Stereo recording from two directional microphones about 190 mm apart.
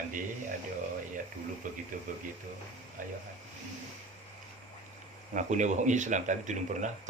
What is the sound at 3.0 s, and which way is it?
Speech, 45° right (ahead or behind).